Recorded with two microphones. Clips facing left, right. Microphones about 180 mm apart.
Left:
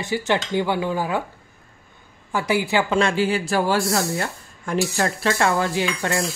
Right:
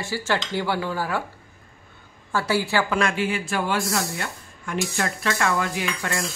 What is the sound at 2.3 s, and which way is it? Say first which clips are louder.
Speech: left 2 dB; 15° left (ahead or behind).